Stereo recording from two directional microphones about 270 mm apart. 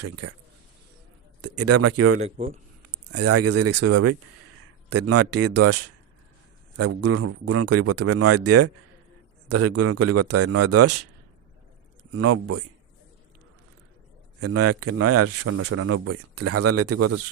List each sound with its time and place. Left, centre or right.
0.0 s speech: right
1.4 s speech: right
2.2 s speech: right
3.1 s speech: right
12.1 s speech: right
14.4 s speech: right